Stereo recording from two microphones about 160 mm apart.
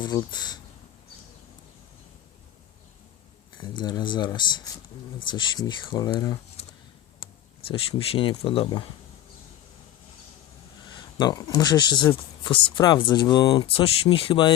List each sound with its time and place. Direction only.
0.0 s speech: 25° left (ahead or behind)
3.6 s speech: 25° left (ahead or behind)
7.2 s a sound: 35° left (ahead or behind)
7.7 s speech: 35° left (ahead or behind)
10.9 s speech: 25° left (ahead or behind)